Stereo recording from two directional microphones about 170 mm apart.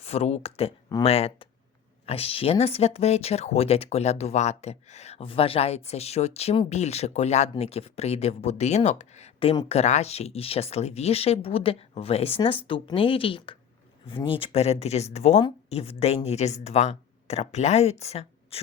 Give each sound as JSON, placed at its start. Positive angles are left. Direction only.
{"t": 0.0, "sound": "a woman's voice", "side_deg": 40}